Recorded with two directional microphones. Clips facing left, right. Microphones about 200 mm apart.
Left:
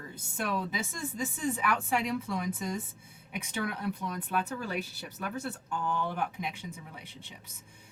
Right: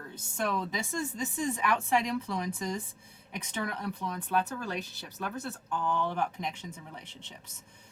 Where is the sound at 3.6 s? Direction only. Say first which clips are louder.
Left 1 dB; 5° left (ahead or behind).